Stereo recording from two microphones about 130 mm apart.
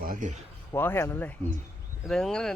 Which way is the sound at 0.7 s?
20° left (ahead or behind).